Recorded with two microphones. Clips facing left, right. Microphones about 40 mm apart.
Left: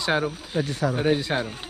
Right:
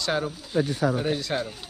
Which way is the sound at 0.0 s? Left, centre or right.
Left.